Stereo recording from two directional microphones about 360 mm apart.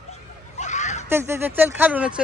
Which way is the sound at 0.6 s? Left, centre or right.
Centre.